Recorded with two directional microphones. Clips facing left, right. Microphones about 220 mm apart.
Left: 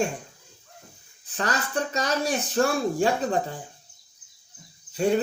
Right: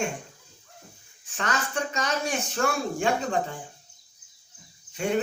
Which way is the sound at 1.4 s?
35° left (ahead or behind).